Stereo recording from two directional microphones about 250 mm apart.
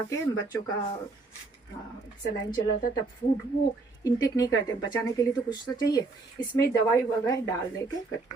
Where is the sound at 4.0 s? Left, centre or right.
Centre.